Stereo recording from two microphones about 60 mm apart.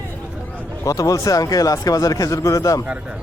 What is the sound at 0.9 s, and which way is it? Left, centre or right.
Speech, left.